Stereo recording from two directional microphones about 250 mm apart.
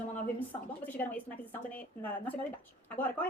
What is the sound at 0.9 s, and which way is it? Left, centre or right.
A woman's voice, centre.